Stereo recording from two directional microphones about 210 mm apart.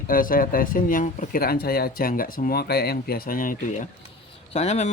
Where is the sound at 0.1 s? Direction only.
40° left (ahead or behind).